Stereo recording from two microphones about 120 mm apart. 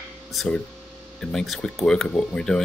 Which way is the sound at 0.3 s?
Centre (ahead or behind).